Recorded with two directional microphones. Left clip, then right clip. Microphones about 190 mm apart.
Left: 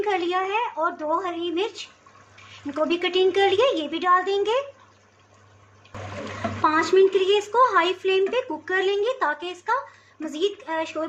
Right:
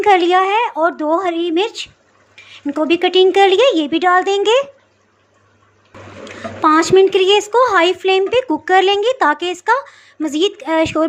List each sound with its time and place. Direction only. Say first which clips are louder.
0.0 s a woman's voice: right 12 dB; 35° right (ahead or behind)
6.6 s a woman's voice: right 8 dB; 40° right (ahead or behind)